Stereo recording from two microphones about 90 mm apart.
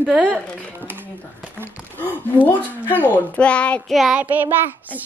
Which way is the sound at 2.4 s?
20° left (ahead or behind).